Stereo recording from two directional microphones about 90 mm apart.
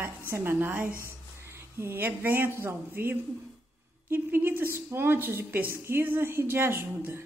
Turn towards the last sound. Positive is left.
turn(degrees=-30)  # may be behind; listen again after turning